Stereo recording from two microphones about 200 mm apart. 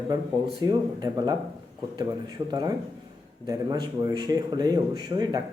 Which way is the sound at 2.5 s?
20° right (ahead or behind).